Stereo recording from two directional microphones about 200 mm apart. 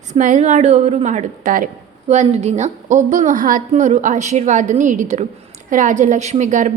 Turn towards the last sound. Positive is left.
turn(degrees=-40)  # may be behind; listen again after turning